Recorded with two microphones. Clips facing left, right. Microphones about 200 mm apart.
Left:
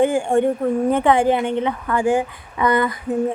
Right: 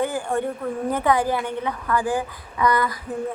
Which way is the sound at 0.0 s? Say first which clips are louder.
Left 7 dB; 25° left (ahead or behind).